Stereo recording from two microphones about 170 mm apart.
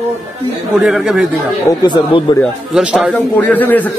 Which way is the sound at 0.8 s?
5° right (ahead or behind).